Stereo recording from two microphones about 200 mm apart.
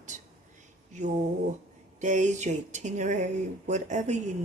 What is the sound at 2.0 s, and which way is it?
Speech, 35° right (ahead or behind).